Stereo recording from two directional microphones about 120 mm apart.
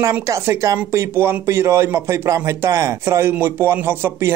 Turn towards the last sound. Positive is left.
turn(degrees=-20)  # may be behind; listen again after turning